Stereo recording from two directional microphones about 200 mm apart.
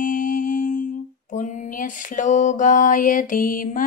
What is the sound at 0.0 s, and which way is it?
Mantra, 40° left (ahead or behind).